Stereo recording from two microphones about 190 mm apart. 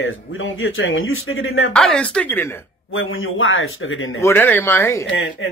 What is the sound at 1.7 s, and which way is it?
Speech, 5° left (ahead or behind).